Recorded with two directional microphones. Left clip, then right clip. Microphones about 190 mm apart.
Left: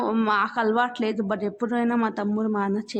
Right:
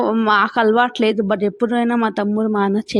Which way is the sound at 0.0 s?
25° right (ahead or behind).